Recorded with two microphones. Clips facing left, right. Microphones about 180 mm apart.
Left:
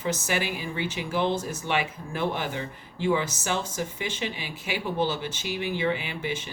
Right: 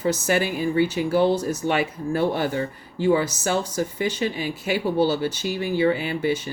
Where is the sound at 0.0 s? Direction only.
40° right (ahead or behind).